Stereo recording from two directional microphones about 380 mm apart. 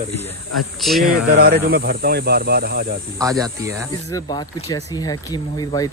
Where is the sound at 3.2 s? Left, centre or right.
Centre.